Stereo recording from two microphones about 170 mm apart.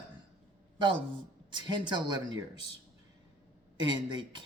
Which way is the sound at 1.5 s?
25° right (ahead or behind).